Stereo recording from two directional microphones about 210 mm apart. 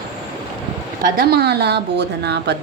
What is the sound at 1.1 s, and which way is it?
Speech, 50° right (ahead or behind).